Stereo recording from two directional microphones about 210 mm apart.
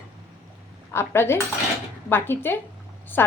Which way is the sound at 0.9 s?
10° left (ahead or behind).